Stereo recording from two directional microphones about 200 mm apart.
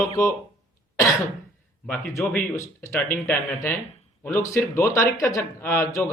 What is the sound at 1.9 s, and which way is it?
Speech, 10° left (ahead or behind).